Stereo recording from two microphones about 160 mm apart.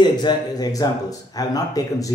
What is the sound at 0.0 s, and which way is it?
Speech, 25° left (ahead or behind).